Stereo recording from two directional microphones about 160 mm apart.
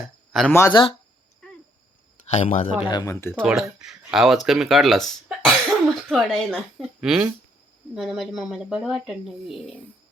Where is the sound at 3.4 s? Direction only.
Centre (ahead or behind).